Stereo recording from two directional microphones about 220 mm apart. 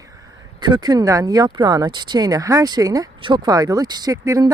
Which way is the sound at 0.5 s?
20° right (ahead or behind).